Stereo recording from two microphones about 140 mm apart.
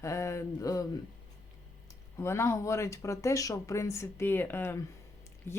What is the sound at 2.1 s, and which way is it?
A woman's voice, 20° left (ahead or behind).